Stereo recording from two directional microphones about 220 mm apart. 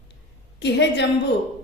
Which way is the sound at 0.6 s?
50° left (ahead or behind).